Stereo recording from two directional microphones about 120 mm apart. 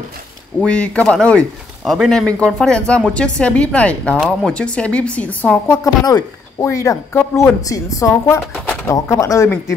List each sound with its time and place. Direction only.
0.6 s a woman's voice: 10° left (ahead or behind)
6.0 s speech: 30° left (ahead or behind)